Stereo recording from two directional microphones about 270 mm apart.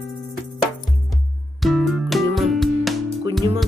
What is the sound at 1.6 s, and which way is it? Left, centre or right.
Music, centre.